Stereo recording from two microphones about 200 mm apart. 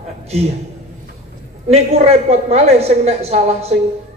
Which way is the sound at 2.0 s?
30° right (ahead or behind).